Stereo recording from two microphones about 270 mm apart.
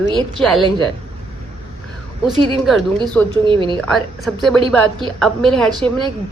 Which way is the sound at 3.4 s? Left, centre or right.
Centre.